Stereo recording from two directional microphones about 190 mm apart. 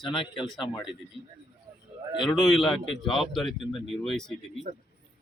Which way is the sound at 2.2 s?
Centre (ahead or behind).